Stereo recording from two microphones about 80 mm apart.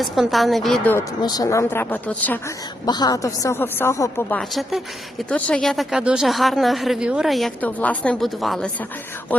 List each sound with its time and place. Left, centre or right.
0.0 s a woman's voice: centre
1.2 s a woman's voice: left
1.5 s a woman's voice: left
2.8 s a woman's voice: left
3.2 s speech: left
3.6 s a woman's voice: left
4.4 s a woman's voice: centre
5.3 s speech: centre
5.6 s a woman's voice: centre
6.0 s speech: centre
6.2 s a woman's voice: centre
7.3 s a woman's voice: centre
7.6 s a woman's voice: centre
8.2 s a woman's voice: centre